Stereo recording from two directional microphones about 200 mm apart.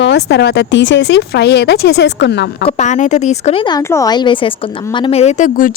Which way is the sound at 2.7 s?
35° left (ahead or behind).